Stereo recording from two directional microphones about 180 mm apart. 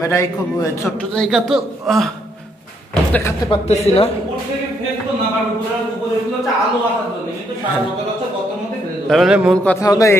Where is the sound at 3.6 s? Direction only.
35° left (ahead or behind).